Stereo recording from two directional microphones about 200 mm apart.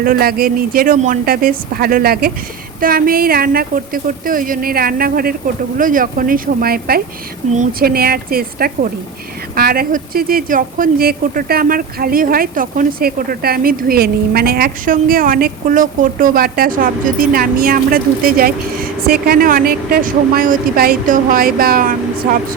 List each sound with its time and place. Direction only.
0.0 s speech: 50° right (ahead or behind)